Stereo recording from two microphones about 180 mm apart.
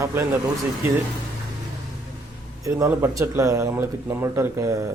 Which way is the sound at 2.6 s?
15° right (ahead or behind).